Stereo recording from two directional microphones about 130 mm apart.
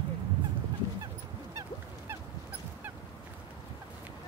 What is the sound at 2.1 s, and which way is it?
Fowl, 15° right (ahead or behind).